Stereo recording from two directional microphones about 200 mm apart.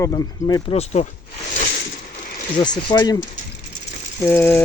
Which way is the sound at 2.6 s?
20° left (ahead or behind).